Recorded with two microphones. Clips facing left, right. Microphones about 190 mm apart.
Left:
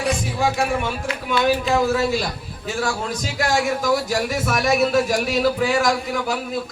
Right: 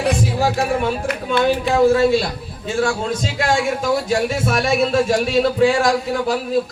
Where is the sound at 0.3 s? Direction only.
35° right (ahead or behind).